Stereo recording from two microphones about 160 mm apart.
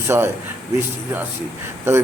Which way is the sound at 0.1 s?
15° right (ahead or behind).